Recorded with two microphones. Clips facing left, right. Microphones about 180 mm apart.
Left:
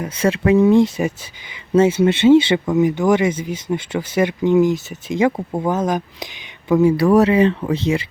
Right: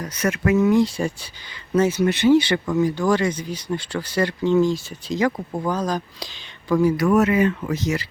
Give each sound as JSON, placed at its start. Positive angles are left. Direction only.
{"t": 0.0, "sound": "speech", "side_deg": 30}